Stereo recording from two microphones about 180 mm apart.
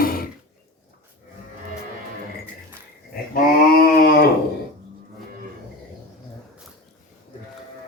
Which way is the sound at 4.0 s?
60° left (ahead or behind).